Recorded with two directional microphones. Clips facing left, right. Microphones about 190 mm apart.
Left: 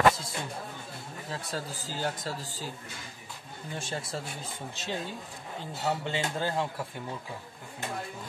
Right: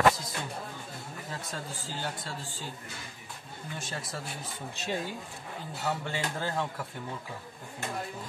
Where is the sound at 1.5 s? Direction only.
40° left (ahead or behind).